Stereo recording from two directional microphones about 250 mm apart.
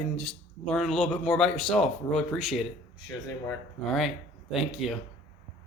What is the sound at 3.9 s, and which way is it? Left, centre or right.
Speech, centre.